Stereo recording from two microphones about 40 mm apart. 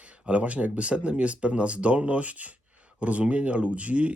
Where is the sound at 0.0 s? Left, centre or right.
Right.